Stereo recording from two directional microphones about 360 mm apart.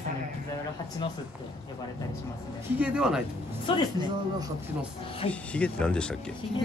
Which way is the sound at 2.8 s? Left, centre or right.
Centre.